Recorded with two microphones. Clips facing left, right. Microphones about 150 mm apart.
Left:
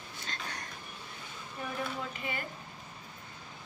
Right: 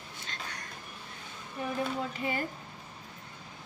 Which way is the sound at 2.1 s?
35° right (ahead or behind).